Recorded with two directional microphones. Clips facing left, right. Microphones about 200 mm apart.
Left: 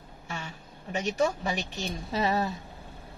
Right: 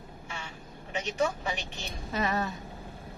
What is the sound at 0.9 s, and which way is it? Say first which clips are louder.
A woman's voice: left 3 dB; 40° left (ahead or behind).